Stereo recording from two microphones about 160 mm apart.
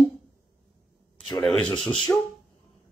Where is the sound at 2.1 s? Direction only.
15° left (ahead or behind).